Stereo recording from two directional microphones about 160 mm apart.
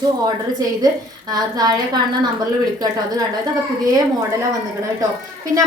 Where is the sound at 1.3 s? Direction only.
25° right (ahead or behind).